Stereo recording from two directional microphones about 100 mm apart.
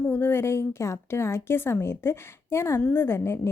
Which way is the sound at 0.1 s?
25° left (ahead or behind).